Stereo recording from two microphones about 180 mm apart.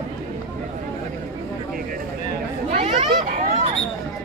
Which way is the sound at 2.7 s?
40° right (ahead or behind).